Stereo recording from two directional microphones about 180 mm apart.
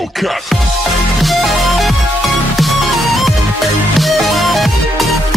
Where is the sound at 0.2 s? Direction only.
Centre (ahead or behind).